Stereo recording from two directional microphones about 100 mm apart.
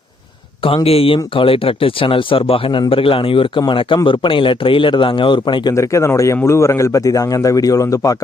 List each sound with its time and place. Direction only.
0.9 s speech: 70° left (ahead or behind); by 5.7 s 50° left (ahead or behind)
5.7 s speech: 30° left (ahead or behind)